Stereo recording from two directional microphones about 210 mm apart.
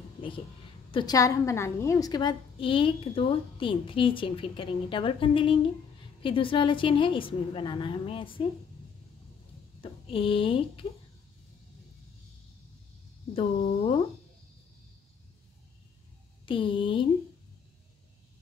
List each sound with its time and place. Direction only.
0.9 s a woman's voice: 15° left (ahead or behind)
9.8 s speech: 25° left (ahead or behind)
13.3 s a woman's voice: 25° left (ahead or behind)
16.4 s a woman's voice: 25° left (ahead or behind)